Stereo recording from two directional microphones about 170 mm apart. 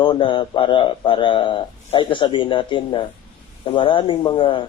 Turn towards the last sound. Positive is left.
turn(degrees=30)  # may be behind; listen again after turning